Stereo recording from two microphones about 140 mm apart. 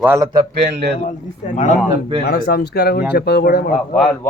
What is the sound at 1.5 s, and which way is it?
Speech, 60° left (ahead or behind).